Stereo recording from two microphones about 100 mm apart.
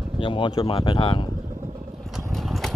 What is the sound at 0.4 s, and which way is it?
Speech, 55° left (ahead or behind).